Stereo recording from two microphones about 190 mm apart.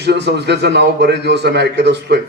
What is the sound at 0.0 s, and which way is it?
A man's voice, 65° right (ahead or behind).